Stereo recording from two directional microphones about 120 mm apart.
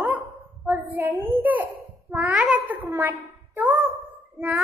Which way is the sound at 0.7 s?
15° right (ahead or behind).